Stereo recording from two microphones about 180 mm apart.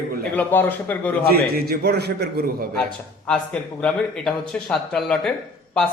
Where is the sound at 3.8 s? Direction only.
5° left (ahead or behind).